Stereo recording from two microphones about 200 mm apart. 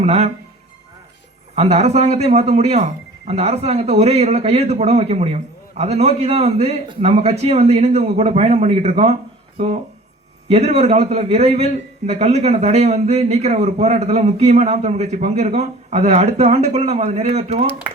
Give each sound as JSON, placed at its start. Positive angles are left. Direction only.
{"t": 0.0, "sound": "speech", "side_deg": -30}
{"t": 1.5, "sound": "speech", "side_deg": -35}